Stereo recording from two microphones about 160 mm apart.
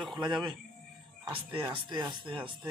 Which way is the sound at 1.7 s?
30° right (ahead or behind).